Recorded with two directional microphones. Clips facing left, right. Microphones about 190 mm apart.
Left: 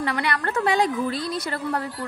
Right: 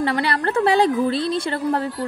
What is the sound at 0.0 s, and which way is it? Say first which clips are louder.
A woman's voice: right 4 dB; 30° right (ahead or behind).